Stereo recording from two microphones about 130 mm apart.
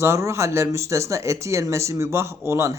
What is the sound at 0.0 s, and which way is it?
Speech, 20° right (ahead or behind).